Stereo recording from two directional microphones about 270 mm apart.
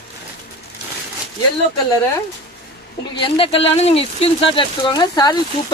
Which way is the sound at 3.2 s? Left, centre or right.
Centre.